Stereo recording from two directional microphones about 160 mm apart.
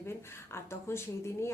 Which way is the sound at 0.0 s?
15° left (ahead or behind).